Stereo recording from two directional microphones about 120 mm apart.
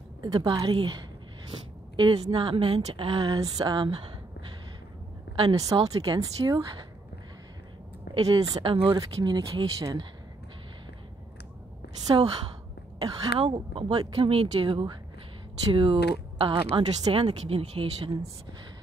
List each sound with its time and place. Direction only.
0.2 s speech: 35° right (ahead or behind)
2.0 s a woman's voice: 40° right (ahead or behind)
3.3 s speech: 35° right (ahead or behind)
5.3 s speech: 45° right (ahead or behind)
5.9 s speech: 30° right (ahead or behind)
8.2 s speech: 30° right (ahead or behind)
8.6 s speech: 50° right (ahead or behind)
8.9 s speech: 35° right (ahead or behind)
13.4 s speech: 50° right (ahead or behind)